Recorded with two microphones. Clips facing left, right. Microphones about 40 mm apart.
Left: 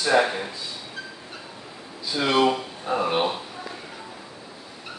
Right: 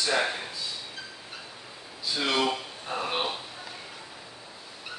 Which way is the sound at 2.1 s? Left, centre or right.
Centre.